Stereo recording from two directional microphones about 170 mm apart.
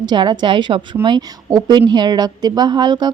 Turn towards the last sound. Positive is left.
turn(degrees=-25)  # may be behind; listen again after turning